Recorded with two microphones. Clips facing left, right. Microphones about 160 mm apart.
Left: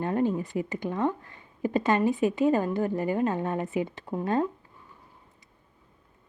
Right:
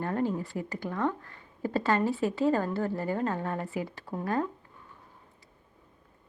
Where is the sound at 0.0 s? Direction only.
20° left (ahead or behind).